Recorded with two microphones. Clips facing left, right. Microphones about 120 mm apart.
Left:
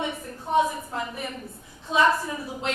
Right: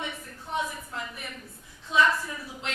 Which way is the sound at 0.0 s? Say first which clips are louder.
Left 6 dB; 30° left (ahead or behind).